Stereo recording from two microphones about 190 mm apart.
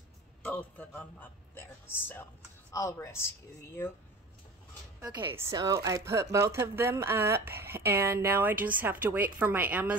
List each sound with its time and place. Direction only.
0.4 s a man's voice: 10° left (ahead or behind)
5.3 s speech: 20° right (ahead or behind)